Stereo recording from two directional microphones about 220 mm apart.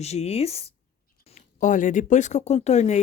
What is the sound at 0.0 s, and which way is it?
Speech, 30° left (ahead or behind).